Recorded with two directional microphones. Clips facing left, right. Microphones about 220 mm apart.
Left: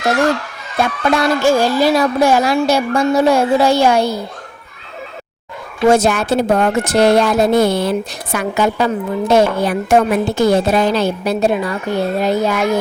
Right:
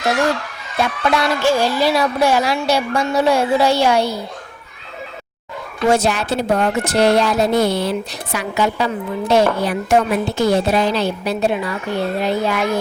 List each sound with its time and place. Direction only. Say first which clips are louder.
0.8 s speech: left 3 dB; 50° left (ahead or behind)
5.9 s speech: left 4 dB; 50° left (ahead or behind)